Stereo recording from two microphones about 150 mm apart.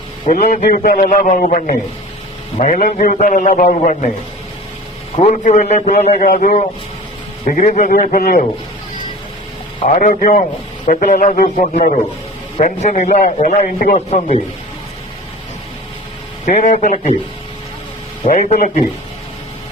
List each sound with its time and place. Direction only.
0.3 s a man's voice: 65° left (ahead or behind)
3.6 s a man's voice: 50° left (ahead or behind)
5.3 s a man's voice: 60° left (ahead or behind)
5.7 s a man's voice: 50° left (ahead or behind)
6.1 s a man's voice: 80° left; by 7.8 s 60° left (ahead or behind)
7.8 s speech: 90° left
9.8 s a man's voice: 50° left (ahead or behind); by 10.4 s 65° left (ahead or behind)
10.8 s a man's voice: 55° left (ahead or behind)
13.7 s a man's voice: 70° left (ahead or behind)
14.1 s a man's voice: 45° left (ahead or behind)
16.5 s a man's voice: 55° left (ahead or behind)
18.3 s a man's voice: 60° left (ahead or behind)